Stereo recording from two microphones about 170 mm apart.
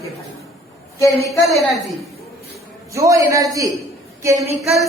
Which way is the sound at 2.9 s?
20° right (ahead or behind).